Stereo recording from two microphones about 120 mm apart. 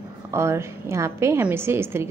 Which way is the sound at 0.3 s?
25° right (ahead or behind).